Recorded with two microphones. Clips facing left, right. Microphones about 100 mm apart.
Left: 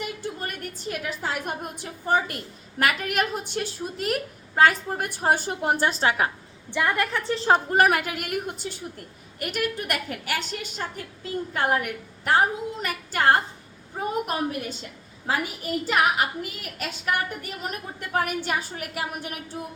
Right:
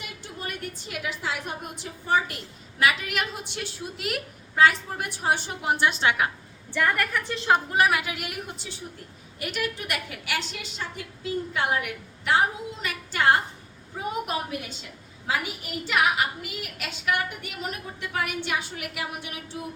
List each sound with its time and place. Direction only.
0.0 s a woman's voice: 45° left (ahead or behind)
6.7 s a woman's voice: 20° left (ahead or behind); by 19.4 s 40° left (ahead or behind)